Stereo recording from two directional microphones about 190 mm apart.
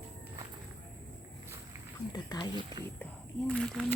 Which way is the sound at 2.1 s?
20° left (ahead or behind).